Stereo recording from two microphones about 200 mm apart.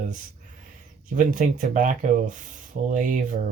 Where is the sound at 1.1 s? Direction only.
40° right (ahead or behind).